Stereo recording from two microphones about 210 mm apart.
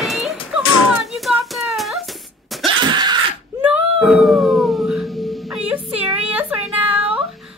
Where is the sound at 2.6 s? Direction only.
20° right (ahead or behind).